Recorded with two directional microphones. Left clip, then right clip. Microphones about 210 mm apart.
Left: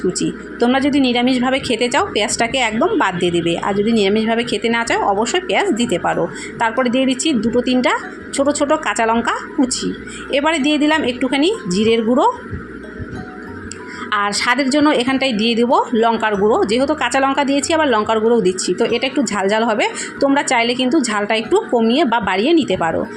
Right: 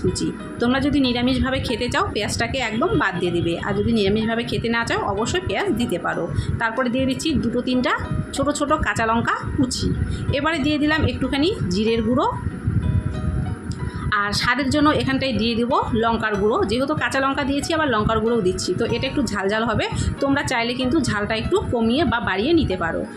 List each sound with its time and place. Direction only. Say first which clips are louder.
0.1 s a woman's voice: left 4 dB; 15° left (ahead or behind)
14.1 s a woman's voice: left 4 dB; 20° left (ahead or behind)